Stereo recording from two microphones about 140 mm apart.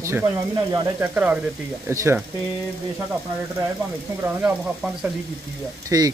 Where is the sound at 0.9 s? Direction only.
10° right (ahead or behind).